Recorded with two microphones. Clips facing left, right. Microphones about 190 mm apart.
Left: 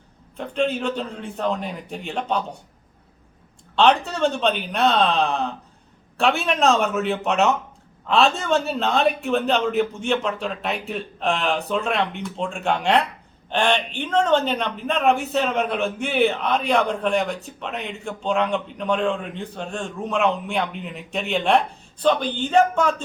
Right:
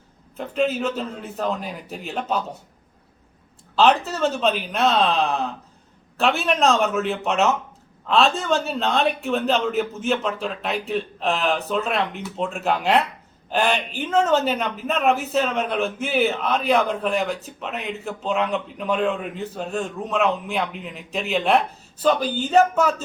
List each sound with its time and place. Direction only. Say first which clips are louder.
0.3 s a man's voice: right 1 dB; 5° right (ahead or behind)
3.8 s a man's voice: even; 5° right (ahead or behind)